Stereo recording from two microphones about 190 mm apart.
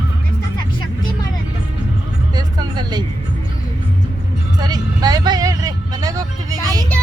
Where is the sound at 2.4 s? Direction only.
20° right (ahead or behind).